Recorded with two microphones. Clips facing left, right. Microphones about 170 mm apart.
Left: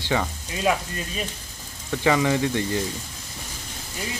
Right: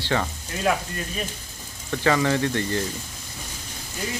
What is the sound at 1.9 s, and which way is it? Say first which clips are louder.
Speech: left 1 dB; 15° left (ahead or behind).